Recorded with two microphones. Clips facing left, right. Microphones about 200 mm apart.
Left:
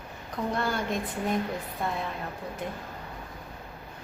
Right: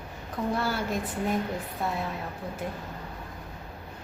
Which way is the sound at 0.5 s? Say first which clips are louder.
Left 1 dB; 5° right (ahead or behind).